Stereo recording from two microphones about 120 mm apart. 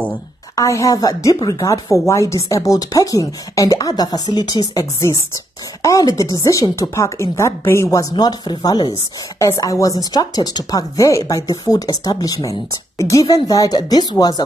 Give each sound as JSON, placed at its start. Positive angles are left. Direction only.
{"t": 0.6, "sound": "a woman's voice", "side_deg": 25}